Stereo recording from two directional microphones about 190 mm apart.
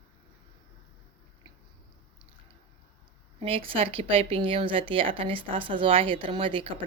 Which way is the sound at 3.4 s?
30° right (ahead or behind).